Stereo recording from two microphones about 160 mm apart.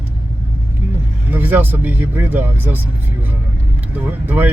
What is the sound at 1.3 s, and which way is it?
Speech, 10° right (ahead or behind).